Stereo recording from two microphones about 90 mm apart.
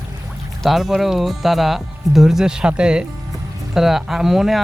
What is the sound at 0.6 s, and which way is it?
Speech, centre (ahead or behind).